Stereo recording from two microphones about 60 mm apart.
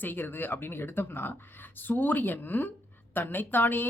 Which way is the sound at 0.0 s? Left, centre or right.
Left.